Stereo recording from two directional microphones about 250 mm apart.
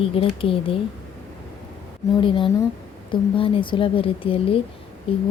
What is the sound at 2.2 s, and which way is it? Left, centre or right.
Speech, centre.